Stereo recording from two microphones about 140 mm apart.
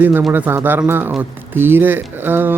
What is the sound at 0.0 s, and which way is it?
Speech, 10° right (ahead or behind).